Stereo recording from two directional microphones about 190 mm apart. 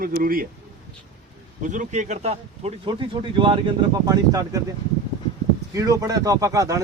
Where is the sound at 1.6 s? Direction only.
40° right (ahead or behind); by 4.6 s 20° right (ahead or behind).